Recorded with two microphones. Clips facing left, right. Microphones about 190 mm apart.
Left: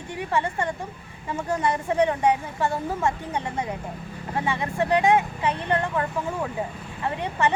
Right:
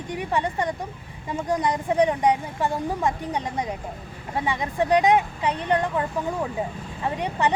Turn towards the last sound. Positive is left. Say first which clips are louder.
# right 1 dB
turn(degrees=-15)  # may be behind; listen again after turning